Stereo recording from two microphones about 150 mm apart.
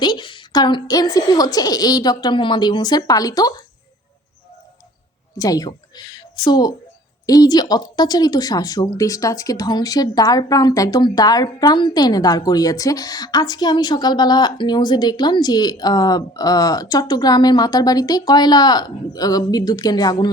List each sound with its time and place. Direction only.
0.0 s speech: 30° left (ahead or behind)
5.4 s speech: 25° left (ahead or behind)